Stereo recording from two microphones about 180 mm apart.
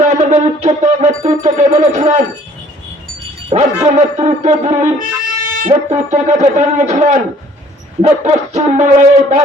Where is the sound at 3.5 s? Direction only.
35° right (ahead or behind).